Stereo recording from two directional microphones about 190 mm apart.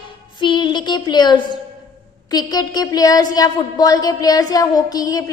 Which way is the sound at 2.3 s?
20° left (ahead or behind).